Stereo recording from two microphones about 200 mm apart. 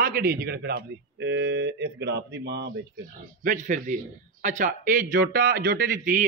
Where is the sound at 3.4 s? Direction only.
40° right (ahead or behind).